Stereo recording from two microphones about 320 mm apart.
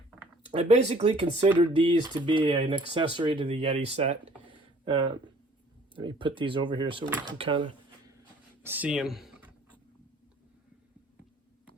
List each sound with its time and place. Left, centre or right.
0.5 s speech: centre
8.6 s speech: centre